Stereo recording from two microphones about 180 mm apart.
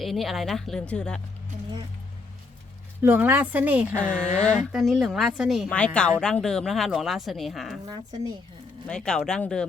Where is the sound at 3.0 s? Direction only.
10° right (ahead or behind).